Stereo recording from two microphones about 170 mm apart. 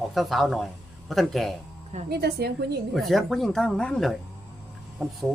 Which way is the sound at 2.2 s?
75° right (ahead or behind).